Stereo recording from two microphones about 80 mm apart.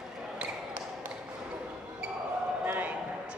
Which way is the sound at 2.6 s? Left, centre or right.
Centre.